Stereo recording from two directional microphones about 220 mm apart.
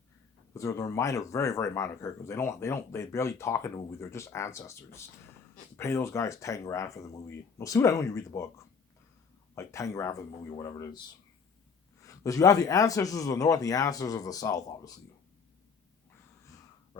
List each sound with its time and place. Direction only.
0.5 s speech: 15° left (ahead or behind)
12.0 s speech: 15° left (ahead or behind)